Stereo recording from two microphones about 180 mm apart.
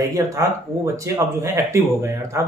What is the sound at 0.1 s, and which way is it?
Speech, 20° right (ahead or behind).